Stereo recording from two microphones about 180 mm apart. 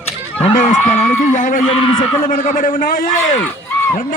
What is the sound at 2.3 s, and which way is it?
A man's voice, 45° left (ahead or behind).